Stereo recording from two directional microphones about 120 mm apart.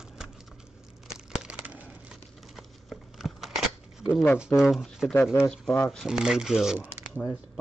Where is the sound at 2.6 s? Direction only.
Centre (ahead or behind).